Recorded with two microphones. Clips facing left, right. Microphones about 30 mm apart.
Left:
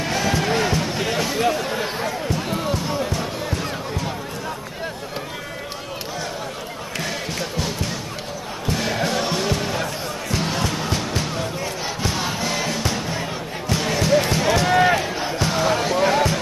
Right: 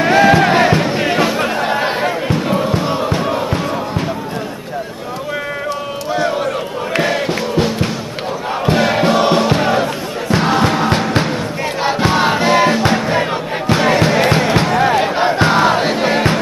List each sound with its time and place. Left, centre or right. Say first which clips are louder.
0.0 s music: right 12 dB; right
7.0 s music: right 10 dB; right
14.4 s basketball bounce: right 4 dB; right
14.7 s a sound: left 1 dB; centre
15.0 s music: right 10 dB; right